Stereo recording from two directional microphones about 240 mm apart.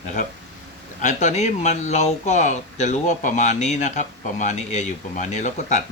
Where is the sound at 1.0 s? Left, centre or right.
Left.